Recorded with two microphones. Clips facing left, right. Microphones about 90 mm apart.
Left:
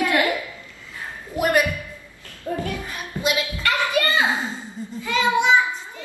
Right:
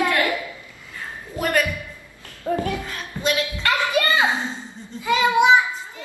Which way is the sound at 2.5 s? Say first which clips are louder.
Right 4 dB; 90° right.